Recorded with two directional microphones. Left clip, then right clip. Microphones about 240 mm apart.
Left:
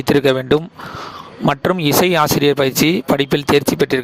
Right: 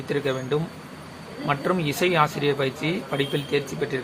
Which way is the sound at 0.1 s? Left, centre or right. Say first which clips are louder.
Left 11 dB; left.